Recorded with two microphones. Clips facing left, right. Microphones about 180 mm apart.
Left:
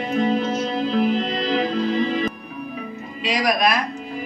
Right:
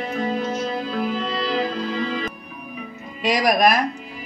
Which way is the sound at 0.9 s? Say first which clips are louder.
Left 4 dB; 20° left (ahead or behind).